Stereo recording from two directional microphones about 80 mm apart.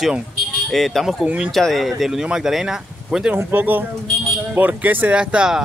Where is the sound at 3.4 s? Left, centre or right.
Right.